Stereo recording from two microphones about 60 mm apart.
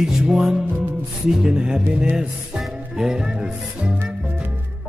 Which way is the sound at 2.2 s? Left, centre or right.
Centre.